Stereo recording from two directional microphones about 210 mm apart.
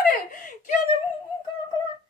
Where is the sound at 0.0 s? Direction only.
40° left (ahead or behind).